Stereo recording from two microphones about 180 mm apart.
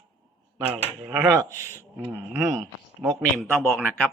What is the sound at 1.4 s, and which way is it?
Speech, 15° right (ahead or behind).